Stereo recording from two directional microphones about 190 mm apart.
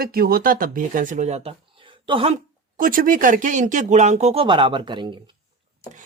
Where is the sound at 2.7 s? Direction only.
45° right (ahead or behind); by 5.2 s 25° right (ahead or behind).